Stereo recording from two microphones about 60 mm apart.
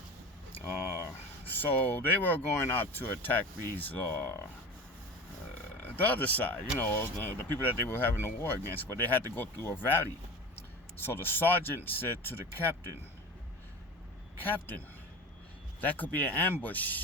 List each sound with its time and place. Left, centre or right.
1.5 s speech: left
5.8 s speech: left
14.4 s speech: left
15.8 s speech: left